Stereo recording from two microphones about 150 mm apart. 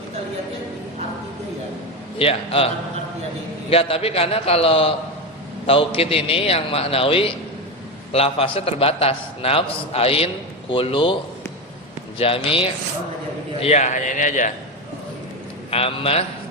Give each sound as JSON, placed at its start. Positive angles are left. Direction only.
{"t": 2.1, "sound": "a man's voice", "side_deg": 40}
{"t": 3.7, "sound": "a man's voice", "side_deg": 40}
{"t": 12.2, "sound": "a man's voice", "side_deg": 40}
{"t": 13.6, "sound": "a man's voice", "side_deg": 50}
{"t": 15.7, "sound": "a man's voice", "side_deg": 40}